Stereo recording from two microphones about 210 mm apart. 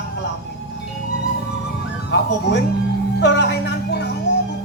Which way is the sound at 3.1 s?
55° left (ahead or behind).